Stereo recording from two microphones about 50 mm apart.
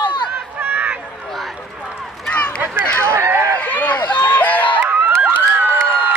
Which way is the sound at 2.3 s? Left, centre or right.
Left.